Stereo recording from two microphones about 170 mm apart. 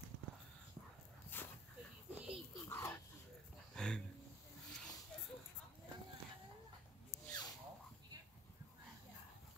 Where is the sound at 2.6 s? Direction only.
15° left (ahead or behind).